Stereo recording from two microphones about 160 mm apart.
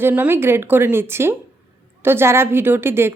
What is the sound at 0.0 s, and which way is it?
A woman's voice, 15° right (ahead or behind).